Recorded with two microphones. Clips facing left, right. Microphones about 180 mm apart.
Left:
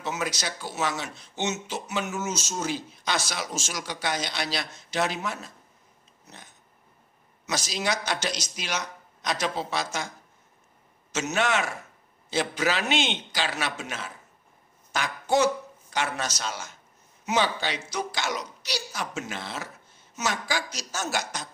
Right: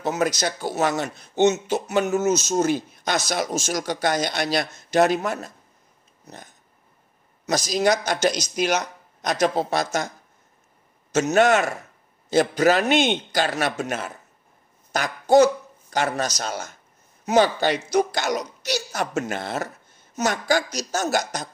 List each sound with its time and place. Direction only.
0.0 s a man's voice: 40° right (ahead or behind)
6.2 s a sound: 45° right (ahead or behind)
7.4 s a man's voice: 40° right (ahead or behind)
11.2 s a man's voice: 40° right (ahead or behind)